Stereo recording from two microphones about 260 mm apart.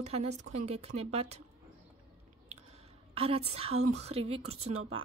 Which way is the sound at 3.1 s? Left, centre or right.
Right.